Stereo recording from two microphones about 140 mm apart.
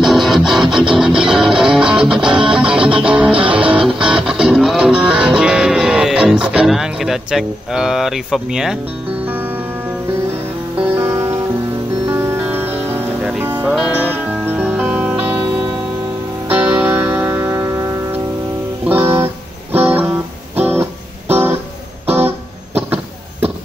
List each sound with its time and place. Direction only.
0.0 s music: centre (ahead or behind)
9.2 s music: 15° right (ahead or behind)
11.0 s music: 20° right (ahead or behind)
22.0 s guitar: 15° right (ahead or behind)